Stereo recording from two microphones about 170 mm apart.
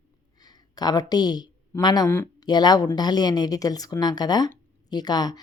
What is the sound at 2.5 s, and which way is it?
Speech, 25° left (ahead or behind).